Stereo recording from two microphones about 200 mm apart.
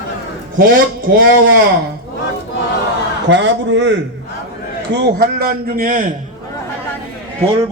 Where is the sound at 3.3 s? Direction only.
65° right (ahead or behind).